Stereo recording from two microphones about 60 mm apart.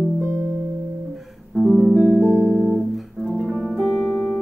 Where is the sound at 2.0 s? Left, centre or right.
Left.